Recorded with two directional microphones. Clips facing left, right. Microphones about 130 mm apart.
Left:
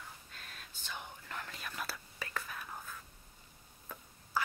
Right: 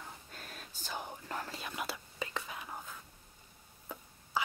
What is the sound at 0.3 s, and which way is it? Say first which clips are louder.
Whispering: right 4 dB; 40° right (ahead or behind).